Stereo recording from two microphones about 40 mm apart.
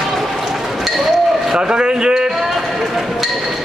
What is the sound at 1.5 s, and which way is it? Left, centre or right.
Speech, right.